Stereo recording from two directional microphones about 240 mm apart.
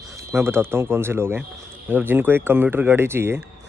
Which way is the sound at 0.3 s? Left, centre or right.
Centre.